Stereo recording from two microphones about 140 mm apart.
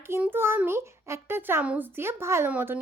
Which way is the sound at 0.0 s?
15° right (ahead or behind).